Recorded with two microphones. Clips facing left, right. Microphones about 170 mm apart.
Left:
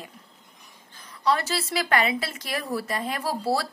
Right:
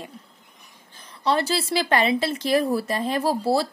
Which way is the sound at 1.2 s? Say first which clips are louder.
Right 2 dB; 30° right (ahead or behind).